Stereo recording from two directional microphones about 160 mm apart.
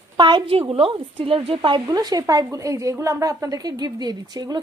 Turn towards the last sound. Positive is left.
turn(degrees=-25)  # may be behind; listen again after turning